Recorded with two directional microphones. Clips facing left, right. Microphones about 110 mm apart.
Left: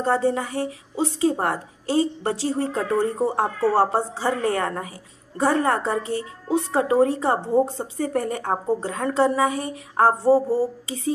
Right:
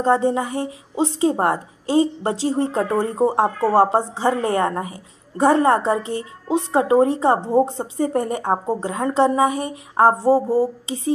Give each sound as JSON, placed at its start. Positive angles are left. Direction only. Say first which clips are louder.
{"t": 0.0, "sound": "a woman's voice", "louder": "right 3 dB", "side_deg": -20}